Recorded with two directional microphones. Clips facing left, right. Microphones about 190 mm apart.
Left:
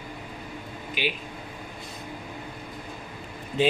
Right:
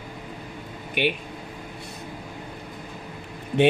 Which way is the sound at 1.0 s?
60° right (ahead or behind).